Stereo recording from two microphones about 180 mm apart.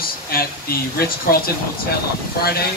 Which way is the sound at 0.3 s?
55° left (ahead or behind).